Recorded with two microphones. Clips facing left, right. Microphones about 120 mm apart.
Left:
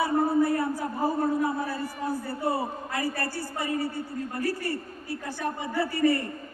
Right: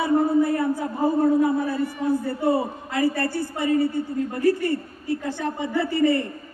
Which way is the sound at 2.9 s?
25° right (ahead or behind).